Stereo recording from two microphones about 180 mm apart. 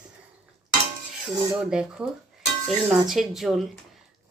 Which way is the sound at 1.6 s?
5° right (ahead or behind).